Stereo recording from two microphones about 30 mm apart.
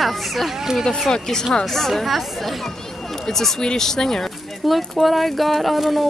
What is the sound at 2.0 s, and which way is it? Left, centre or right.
Speech, centre.